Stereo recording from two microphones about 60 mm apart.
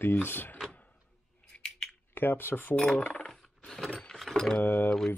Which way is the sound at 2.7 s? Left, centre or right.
Centre.